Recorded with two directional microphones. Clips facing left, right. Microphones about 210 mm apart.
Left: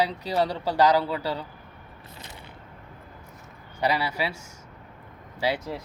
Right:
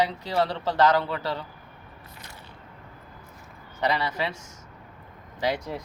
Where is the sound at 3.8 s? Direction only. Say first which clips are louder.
Left 1 dB; 10° left (ahead or behind).